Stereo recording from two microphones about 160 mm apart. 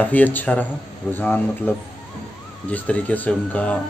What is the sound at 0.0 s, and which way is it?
Speech, 10° left (ahead or behind).